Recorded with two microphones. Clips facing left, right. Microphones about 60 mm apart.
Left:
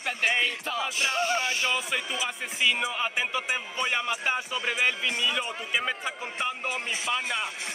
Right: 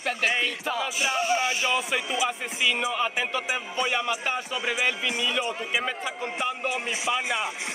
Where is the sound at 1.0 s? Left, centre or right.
Centre.